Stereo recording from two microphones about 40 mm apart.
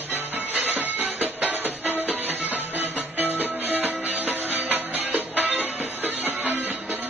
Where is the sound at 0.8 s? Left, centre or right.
Right.